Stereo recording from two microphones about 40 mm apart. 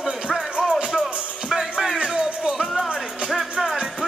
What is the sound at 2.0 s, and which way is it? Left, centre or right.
Music, right.